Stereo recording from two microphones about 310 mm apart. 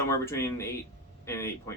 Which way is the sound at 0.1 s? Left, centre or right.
Centre.